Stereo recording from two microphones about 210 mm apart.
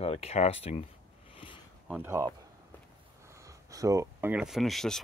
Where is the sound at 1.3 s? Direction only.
25° left (ahead or behind).